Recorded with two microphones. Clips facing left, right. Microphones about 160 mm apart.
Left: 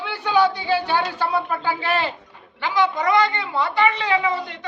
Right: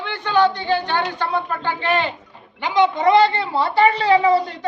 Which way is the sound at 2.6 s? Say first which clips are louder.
Right 4 dB; 20° right (ahead or behind).